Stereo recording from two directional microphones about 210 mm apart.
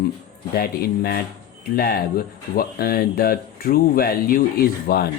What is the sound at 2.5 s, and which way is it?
Speech, 45° left (ahead or behind).